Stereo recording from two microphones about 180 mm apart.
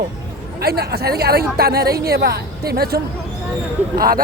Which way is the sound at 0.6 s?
60° right (ahead or behind).